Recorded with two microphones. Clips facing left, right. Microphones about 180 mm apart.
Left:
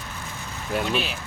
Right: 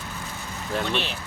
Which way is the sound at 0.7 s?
5° left (ahead or behind).